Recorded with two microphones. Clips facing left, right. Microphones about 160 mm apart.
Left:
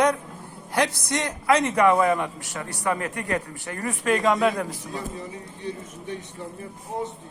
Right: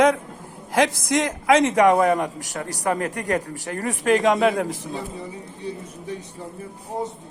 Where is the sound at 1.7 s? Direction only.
40° right (ahead or behind).